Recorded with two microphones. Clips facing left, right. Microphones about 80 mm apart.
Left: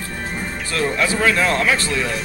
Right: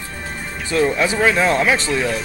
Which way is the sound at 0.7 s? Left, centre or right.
Right.